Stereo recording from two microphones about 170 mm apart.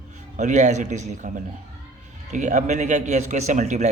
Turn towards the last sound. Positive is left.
turn(degrees=-45)  # may be behind; listen again after turning